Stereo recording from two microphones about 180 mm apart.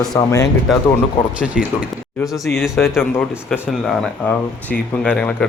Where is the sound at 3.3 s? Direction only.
5° right (ahead or behind).